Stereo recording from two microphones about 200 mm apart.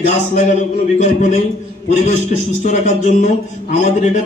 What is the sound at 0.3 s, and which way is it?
A man's voice, 35° left (ahead or behind).